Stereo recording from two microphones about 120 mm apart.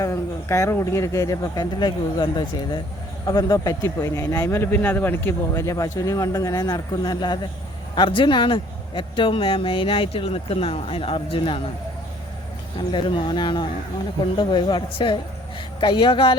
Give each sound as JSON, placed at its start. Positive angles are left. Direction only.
{"t": 0.0, "sound": "speech", "side_deg": 25}
{"t": 12.9, "sound": "speech", "side_deg": 45}